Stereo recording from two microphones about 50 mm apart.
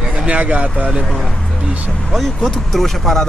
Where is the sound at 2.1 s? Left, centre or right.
Centre.